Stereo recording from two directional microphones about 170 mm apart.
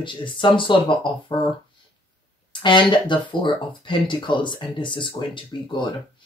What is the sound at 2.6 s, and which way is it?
Speech, 30° left (ahead or behind).